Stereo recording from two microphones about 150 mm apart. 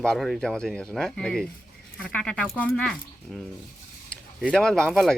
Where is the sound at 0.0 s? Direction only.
Centre (ahead or behind).